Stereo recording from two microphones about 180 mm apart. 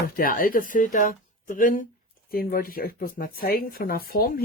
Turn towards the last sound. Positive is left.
turn(degrees=55)  # may be behind; listen again after turning